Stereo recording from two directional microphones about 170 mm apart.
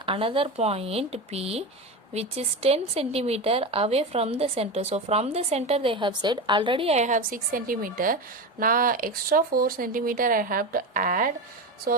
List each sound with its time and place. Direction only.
0.0 s speech: 30° right (ahead or behind); by 11.3 s 50° right (ahead or behind)